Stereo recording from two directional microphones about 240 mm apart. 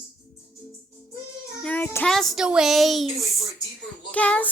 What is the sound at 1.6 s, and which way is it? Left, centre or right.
Child singing, centre.